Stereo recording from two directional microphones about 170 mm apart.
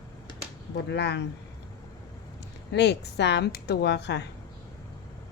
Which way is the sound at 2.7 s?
90° left.